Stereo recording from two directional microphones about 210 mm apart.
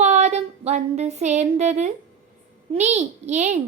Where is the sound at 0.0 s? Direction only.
35° right (ahead or behind).